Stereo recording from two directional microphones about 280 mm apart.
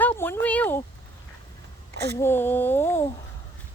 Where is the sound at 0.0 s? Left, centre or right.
Centre.